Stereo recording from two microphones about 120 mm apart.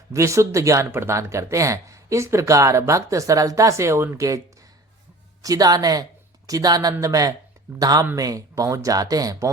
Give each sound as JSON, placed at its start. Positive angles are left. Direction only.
{"t": 0.1, "sound": "speech", "side_deg": -25}
{"t": 5.4, "sound": "speech", "side_deg": -30}